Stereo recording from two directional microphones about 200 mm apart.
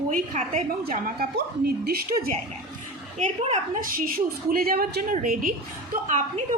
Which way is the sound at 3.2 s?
35° right (ahead or behind).